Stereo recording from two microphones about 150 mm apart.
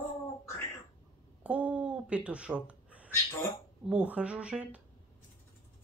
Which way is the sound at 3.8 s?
10° right (ahead or behind).